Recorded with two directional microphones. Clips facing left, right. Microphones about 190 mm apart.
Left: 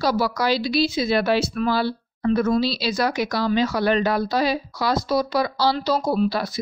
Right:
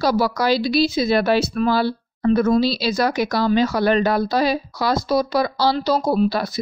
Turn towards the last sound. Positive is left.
turn(degrees=-40)  # may be behind; listen again after turning